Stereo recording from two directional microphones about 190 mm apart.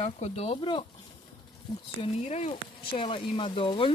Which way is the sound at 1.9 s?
35° left (ahead or behind).